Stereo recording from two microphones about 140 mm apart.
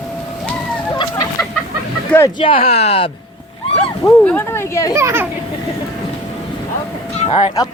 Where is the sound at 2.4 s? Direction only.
40° left (ahead or behind).